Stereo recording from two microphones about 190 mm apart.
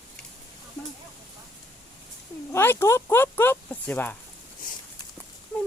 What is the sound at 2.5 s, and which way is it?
Speech, 15° left (ahead or behind).